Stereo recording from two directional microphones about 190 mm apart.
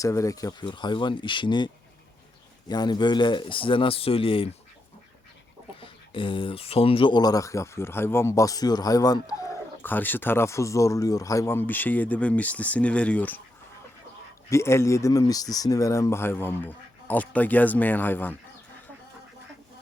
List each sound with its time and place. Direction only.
0.0 s speech: 15° left (ahead or behind)
5.8 s speech: 25° left (ahead or behind); by 13.4 s 10° left (ahead or behind)
14.5 s speech: 15° left (ahead or behind)